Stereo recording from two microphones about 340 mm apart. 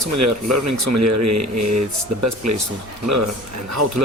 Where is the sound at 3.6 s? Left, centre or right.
Right.